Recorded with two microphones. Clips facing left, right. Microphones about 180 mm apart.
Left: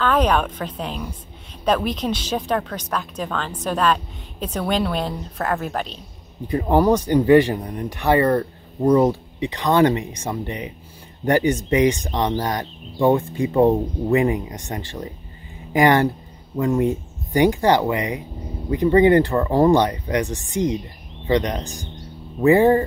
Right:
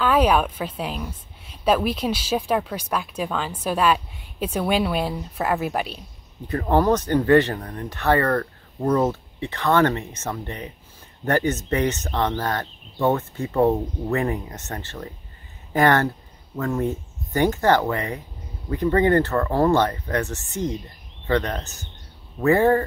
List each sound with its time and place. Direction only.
0.0 s speech: 5° right (ahead or behind)
6.4 s speech: 10° left (ahead or behind)